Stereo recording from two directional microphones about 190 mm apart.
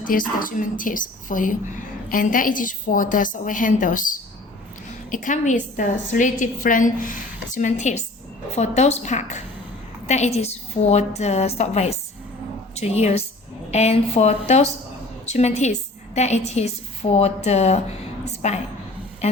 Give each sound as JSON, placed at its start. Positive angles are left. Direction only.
{"t": 0.0, "sound": "a woman's voice", "side_deg": 45}